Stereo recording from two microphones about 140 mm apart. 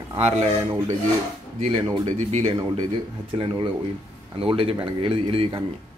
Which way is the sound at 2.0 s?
50° right (ahead or behind).